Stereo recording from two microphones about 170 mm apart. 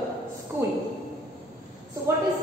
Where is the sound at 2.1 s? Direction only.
15° right (ahead or behind).